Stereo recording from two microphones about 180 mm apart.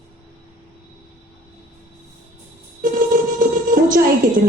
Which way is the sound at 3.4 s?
50° right (ahead or behind).